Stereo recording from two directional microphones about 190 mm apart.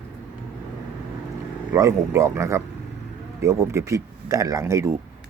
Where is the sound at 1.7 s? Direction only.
15° right (ahead or behind).